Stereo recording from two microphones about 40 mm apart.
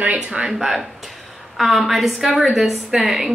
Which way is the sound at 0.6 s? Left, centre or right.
Centre.